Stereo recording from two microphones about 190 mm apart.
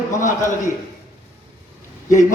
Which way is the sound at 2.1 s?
40° left (ahead or behind).